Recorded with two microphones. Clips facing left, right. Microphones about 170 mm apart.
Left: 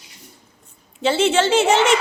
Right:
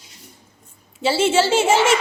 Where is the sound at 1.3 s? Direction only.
5° right (ahead or behind).